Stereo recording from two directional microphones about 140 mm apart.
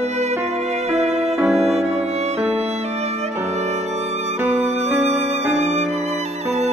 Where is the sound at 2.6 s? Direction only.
50° right (ahead or behind).